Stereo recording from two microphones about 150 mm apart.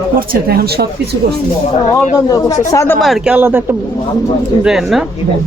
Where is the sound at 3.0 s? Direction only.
Centre (ahead or behind).